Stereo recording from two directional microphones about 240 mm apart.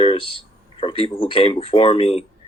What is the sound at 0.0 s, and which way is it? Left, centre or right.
Speech, left.